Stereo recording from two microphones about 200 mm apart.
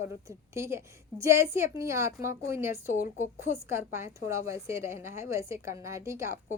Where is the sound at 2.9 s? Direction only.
40° left (ahead or behind).